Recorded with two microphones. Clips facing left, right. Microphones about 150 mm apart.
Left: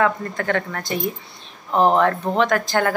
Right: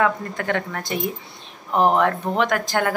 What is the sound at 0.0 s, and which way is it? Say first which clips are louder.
Speech: left 1 dB; 10° right (ahead or behind).